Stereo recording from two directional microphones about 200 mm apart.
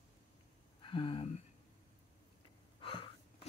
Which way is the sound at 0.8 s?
25° left (ahead or behind).